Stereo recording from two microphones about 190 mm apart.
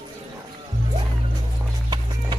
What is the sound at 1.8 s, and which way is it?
Music, 25° right (ahead or behind).